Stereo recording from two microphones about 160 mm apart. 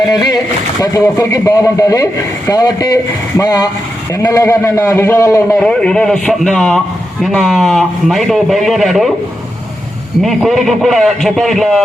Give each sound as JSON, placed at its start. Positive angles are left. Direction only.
{"t": 0.1, "sound": "a man's voice", "side_deg": 20}
{"t": 5.5, "sound": "a man's voice", "side_deg": 5}
{"t": 10.2, "sound": "a man's voice", "side_deg": 0}